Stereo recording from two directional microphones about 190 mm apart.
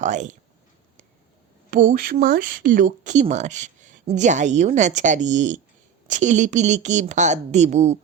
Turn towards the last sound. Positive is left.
turn(degrees=-35)  # may be behind; listen again after turning